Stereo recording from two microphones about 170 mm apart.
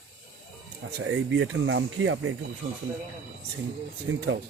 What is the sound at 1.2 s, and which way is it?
Speech, 90° right.